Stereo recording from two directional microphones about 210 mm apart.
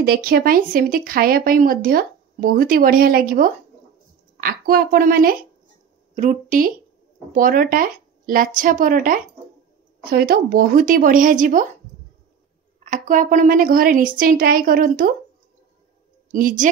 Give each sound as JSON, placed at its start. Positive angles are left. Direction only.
{"t": 0.0, "sound": "a woman's voice", "side_deg": -45}
{"t": 12.8, "sound": "a woman's voice", "side_deg": -40}
{"t": 16.3, "sound": "a woman's voice", "side_deg": -40}